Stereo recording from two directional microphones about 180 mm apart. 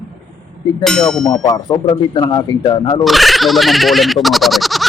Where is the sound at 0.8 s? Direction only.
Centre (ahead or behind).